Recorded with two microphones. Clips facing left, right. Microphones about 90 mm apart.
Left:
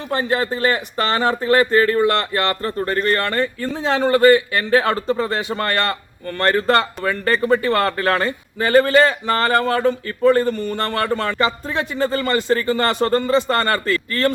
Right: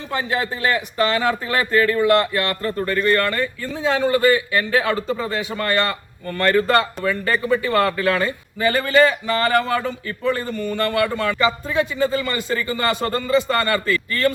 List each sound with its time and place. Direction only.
0.1 s speech: 40° left (ahead or behind)
7.0 s speech: 40° left (ahead or behind)